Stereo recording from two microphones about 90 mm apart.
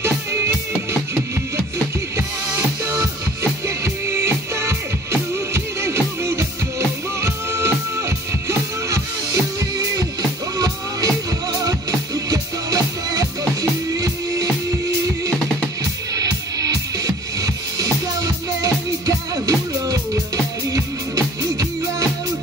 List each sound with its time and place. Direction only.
0.0 s music: 30° right (ahead or behind)
2.1 s music: 35° right (ahead or behind)
16.2 s music: 40° right (ahead or behind)